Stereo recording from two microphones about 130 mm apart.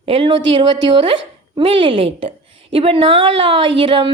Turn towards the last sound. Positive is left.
turn(degrees=-40)  # may be behind; listen again after turning